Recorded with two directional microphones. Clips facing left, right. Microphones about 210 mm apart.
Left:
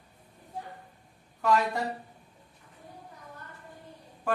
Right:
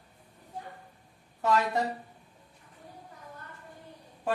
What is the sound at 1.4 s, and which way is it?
Speech, 20° right (ahead or behind).